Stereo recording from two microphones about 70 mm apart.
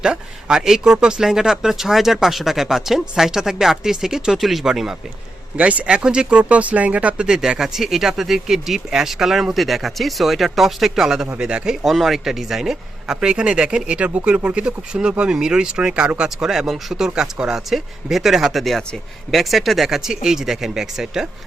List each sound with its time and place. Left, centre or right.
0.0 s speech: centre
5.5 s speech: centre
7.3 s speech: centre